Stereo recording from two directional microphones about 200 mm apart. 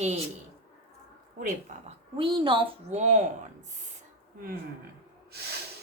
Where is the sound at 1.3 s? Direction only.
40° right (ahead or behind).